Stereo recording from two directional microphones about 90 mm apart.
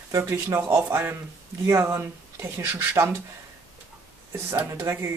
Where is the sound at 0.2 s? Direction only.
25° right (ahead or behind).